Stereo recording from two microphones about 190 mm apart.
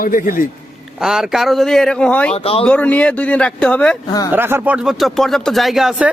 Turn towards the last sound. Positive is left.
turn(degrees=-5)  # may be behind; listen again after turning